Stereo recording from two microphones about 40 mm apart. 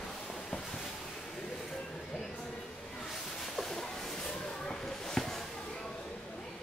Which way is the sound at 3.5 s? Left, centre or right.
Centre.